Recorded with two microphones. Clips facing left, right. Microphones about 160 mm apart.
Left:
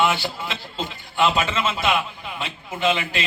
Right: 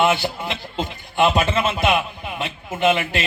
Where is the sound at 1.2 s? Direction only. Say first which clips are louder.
Right 3 dB; 55° right (ahead or behind).